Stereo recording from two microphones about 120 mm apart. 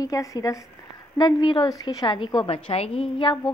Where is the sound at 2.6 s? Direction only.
55° left (ahead or behind).